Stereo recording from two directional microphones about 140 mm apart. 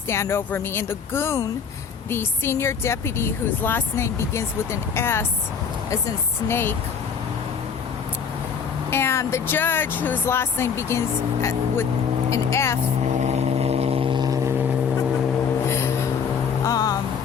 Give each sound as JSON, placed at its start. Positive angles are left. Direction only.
{"t": 0.1, "sound": "speech", "side_deg": 20}
{"t": 8.9, "sound": "speech", "side_deg": 20}
{"t": 13.1, "sound": "vehicle", "side_deg": -50}
{"t": 15.6, "sound": "a sound", "side_deg": 20}
{"t": 16.6, "sound": "vehicle", "side_deg": 25}